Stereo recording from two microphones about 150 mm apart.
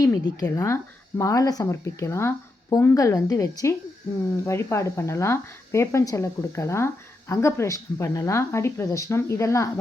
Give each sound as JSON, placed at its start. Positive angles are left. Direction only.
{"t": 0.0, "sound": "speech", "side_deg": 20}